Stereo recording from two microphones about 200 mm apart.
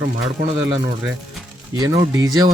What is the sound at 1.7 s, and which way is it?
Speech, 20° right (ahead or behind).